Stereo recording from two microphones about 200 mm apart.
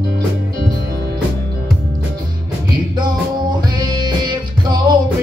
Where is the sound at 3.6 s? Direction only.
20° right (ahead or behind).